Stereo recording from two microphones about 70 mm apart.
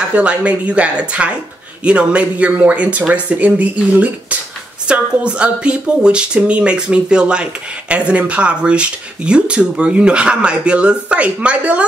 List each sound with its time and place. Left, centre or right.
0.1 s speech: centre